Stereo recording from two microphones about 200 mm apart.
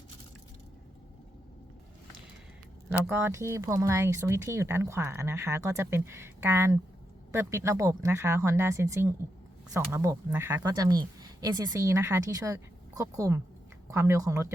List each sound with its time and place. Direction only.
2.9 s speech: 10° right (ahead or behind)